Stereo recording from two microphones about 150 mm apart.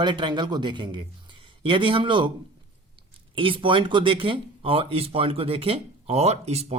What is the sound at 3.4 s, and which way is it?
A man's voice, 35° right (ahead or behind).